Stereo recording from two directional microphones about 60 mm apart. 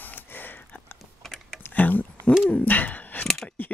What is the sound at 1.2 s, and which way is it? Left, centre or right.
Typing, centre.